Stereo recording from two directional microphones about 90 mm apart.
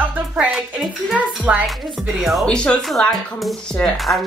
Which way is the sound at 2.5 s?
10° left (ahead or behind).